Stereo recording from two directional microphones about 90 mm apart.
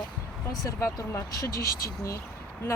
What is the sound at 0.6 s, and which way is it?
Speech, 30° left (ahead or behind).